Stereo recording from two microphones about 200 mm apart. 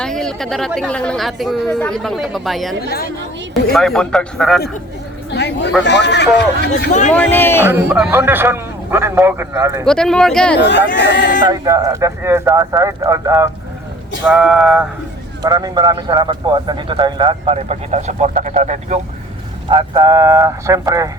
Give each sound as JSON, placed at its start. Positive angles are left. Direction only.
{"t": 0.0, "sound": "speech", "side_deg": 5}
{"t": 5.3, "sound": "a man's voice", "side_deg": 60}
{"t": 7.1, "sound": "speech", "side_deg": 10}
{"t": 7.7, "sound": "a man's voice", "side_deg": -5}
{"t": 9.8, "sound": "speech", "side_deg": 5}
{"t": 10.6, "sound": "a man's voice", "side_deg": 60}
{"t": 11.4, "sound": "a man's voice", "side_deg": -20}
{"t": 14.3, "sound": "speech", "side_deg": -5}
{"t": 15.4, "sound": "speech", "side_deg": -20}
{"t": 19.7, "sound": "a man's voice", "side_deg": -20}